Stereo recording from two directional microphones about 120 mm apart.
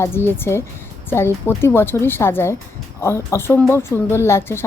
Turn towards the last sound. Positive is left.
turn(degrees=20)  # may be behind; listen again after turning